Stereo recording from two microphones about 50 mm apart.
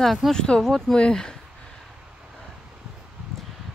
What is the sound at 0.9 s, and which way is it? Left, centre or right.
Speech, centre.